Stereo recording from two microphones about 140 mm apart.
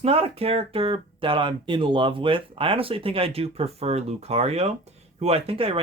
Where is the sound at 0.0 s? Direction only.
45° right (ahead or behind).